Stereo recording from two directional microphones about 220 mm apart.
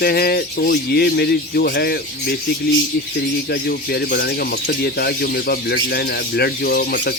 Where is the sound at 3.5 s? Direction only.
45° left (ahead or behind).